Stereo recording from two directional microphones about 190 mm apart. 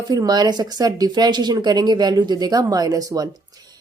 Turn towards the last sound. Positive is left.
turn(degrees=-20)  # may be behind; listen again after turning